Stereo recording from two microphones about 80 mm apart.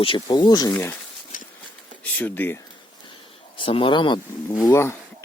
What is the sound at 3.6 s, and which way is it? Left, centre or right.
Speech, left.